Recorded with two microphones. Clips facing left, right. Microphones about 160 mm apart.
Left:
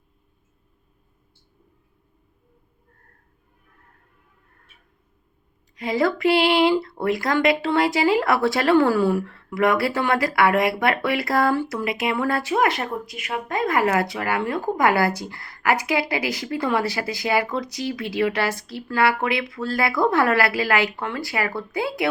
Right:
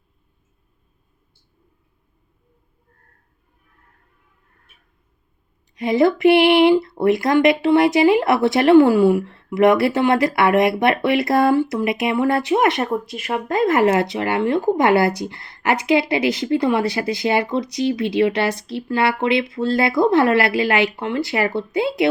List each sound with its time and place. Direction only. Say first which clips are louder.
5.7 s speech: right 6 dB; 20° right (ahead or behind)